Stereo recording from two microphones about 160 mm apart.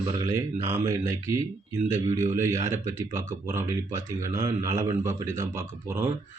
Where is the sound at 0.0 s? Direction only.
25° right (ahead or behind).